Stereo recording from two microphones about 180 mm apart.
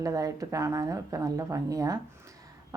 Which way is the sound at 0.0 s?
20° right (ahead or behind).